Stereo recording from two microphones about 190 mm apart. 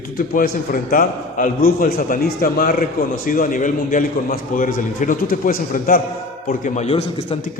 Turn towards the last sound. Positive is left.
turn(degrees=30)  # may be behind; listen again after turning